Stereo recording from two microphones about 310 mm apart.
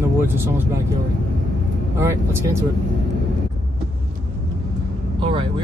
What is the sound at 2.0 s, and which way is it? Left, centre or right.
Speech, centre.